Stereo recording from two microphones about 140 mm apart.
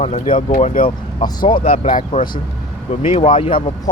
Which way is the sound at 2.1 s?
90° left.